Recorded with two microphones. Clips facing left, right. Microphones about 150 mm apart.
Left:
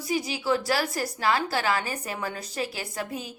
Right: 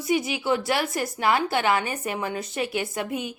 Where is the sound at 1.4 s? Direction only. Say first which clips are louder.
Right 4 dB; 20° right (ahead or behind).